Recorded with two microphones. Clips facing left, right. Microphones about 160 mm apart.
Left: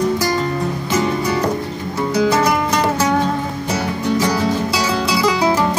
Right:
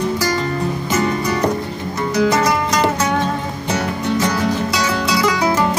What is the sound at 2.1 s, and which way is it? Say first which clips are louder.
Music: even; 10° left (ahead or behind).